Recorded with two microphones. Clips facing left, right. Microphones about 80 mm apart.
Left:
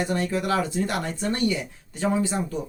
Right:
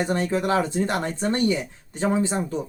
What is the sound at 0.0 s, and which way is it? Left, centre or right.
Speech, right.